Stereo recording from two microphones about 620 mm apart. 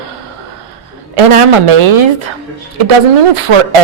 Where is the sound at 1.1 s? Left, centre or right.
Right.